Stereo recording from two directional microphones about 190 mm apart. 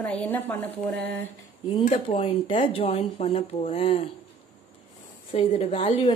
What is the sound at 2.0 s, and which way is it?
Speech, 30° left (ahead or behind).